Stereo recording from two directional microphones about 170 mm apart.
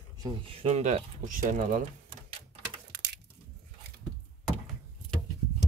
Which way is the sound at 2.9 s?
80° right.